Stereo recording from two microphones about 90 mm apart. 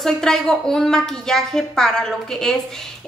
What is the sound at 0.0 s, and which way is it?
A woman's voice, 5° left (ahead or behind).